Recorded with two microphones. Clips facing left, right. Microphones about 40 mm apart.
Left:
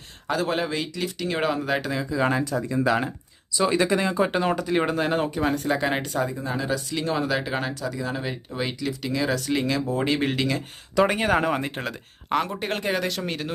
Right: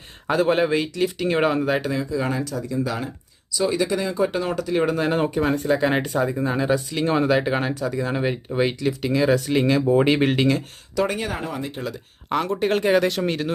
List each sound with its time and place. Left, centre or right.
0.3 s speech: centre
2.1 s speech: left
4.4 s speech: centre
4.9 s speech: centre
5.9 s speech: centre
6.3 s speech: right
10.0 s speech: right
10.9 s speech: left
11.3 s speech: left
11.5 s speech: left
12.5 s speech: centre